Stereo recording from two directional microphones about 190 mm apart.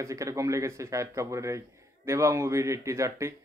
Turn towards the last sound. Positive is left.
turn(degrees=-15)  # may be behind; listen again after turning